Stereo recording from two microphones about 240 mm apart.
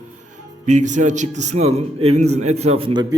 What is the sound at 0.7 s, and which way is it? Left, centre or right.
A man's voice, right.